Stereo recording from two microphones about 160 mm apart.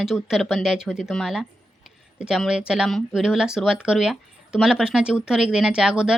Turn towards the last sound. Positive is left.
turn(degrees=-5)  # may be behind; listen again after turning